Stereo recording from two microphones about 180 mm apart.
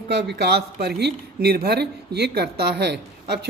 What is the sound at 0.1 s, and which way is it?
A woman's voice, 70° right (ahead or behind).